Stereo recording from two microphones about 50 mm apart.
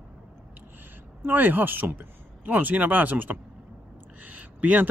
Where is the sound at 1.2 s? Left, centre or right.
Right.